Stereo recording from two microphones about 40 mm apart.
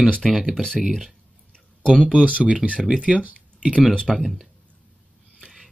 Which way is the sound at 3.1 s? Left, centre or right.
Right.